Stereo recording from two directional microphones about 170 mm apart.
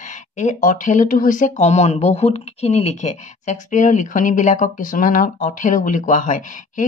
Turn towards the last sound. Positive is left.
turn(degrees=50)  # may be behind; listen again after turning